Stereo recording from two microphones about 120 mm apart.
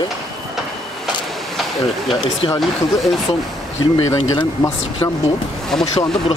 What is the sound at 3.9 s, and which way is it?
Speech, 30° left (ahead or behind).